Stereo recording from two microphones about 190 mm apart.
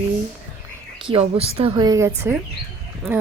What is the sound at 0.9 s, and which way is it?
A woman's voice, 30° right (ahead or behind).